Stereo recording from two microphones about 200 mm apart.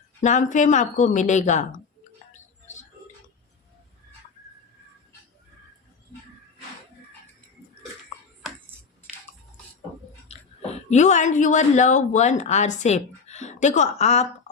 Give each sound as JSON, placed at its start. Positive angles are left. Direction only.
{"t": 0.2, "sound": "speech", "side_deg": 40}
{"t": 10.2, "sound": "speech", "side_deg": 35}